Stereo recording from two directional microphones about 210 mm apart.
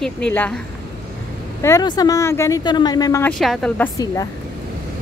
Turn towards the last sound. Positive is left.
turn(degrees=15)  # may be behind; listen again after turning